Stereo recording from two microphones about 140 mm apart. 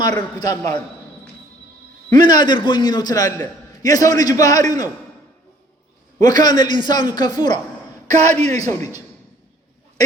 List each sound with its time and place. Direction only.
0.3 s a man's voice: 30° left (ahead or behind)
2.1 s a man's voice: 30° left (ahead or behind)
6.1 s a man's voice: 30° left (ahead or behind)
8.1 s a man's voice: 50° right (ahead or behind)